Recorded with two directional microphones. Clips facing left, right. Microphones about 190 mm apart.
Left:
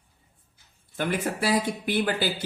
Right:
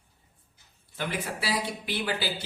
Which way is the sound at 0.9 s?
50° left (ahead or behind).